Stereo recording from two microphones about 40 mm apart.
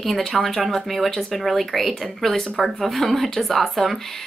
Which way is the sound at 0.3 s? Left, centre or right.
Centre.